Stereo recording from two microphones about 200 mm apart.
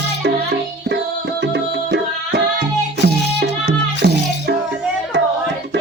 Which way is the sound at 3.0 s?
55° right (ahead or behind).